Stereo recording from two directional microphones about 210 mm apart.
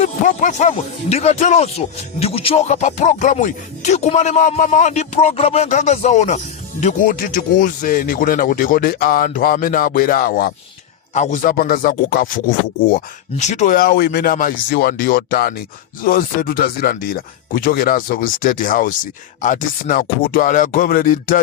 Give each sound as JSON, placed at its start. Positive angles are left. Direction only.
{"t": 0.0, "sound": "speech", "side_deg": 35}
{"t": 11.1, "sound": "speech", "side_deg": 35}
{"t": 13.4, "sound": "speech", "side_deg": 35}